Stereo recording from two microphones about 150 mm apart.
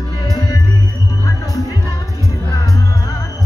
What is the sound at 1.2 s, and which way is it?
Music, 20° left (ahead or behind).